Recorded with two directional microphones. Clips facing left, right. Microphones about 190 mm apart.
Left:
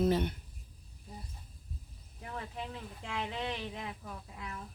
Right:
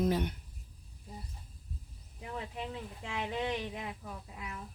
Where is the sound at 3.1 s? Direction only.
15° right (ahead or behind).